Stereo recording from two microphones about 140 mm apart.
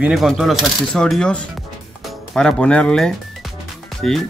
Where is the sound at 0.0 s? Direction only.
Centre (ahead or behind).